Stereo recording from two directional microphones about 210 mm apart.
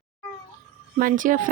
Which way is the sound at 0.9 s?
40° right (ahead or behind).